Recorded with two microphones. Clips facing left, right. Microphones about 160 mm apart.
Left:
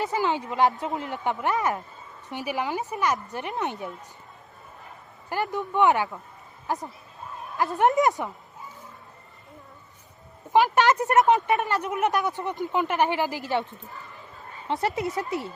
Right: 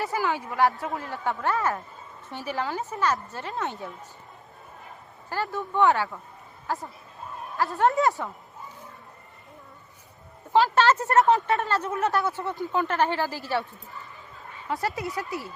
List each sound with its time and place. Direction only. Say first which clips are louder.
0.0 s a woman's voice: left 2 dB; 20° left (ahead or behind)
5.3 s a woman's voice: left 2 dB; 15° left (ahead or behind)
10.5 s speech: even; 15° left (ahead or behind)
14.7 s a woman's voice: left 3 dB; 20° left (ahead or behind)